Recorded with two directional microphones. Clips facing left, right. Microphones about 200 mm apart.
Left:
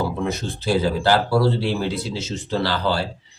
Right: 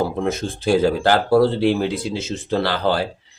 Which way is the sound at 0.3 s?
50° right (ahead or behind).